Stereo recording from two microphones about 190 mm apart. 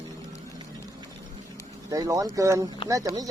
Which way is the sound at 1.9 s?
20° right (ahead or behind).